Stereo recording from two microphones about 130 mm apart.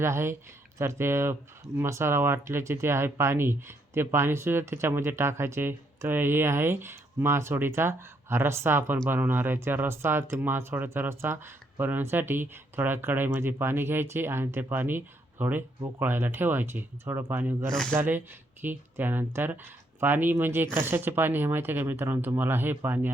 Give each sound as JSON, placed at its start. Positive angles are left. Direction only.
{"t": 0.0, "sound": "speech", "side_deg": -20}
{"t": 17.7, "sound": "speech", "side_deg": 5}
{"t": 17.9, "sound": "speech", "side_deg": -15}